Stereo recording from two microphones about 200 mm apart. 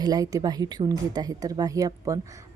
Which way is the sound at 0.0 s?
20° right (ahead or behind).